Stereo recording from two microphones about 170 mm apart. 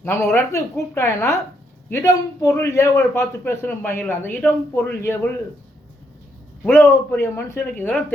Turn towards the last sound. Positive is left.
turn(degrees=10)  # may be behind; listen again after turning